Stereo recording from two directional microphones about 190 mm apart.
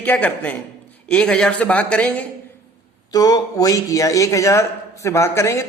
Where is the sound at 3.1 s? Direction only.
20° left (ahead or behind).